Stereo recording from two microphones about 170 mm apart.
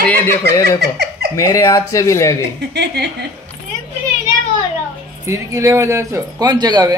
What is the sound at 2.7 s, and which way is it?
Speech, 80° right.